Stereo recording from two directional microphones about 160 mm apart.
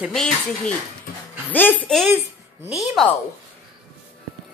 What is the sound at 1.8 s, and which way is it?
Speech, centre (ahead or behind).